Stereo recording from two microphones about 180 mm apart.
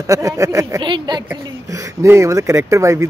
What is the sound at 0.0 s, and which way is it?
Speech, 15° right (ahead or behind).